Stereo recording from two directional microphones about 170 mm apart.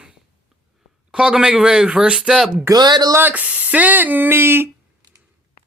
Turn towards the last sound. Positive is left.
turn(degrees=-15)  # may be behind; listen again after turning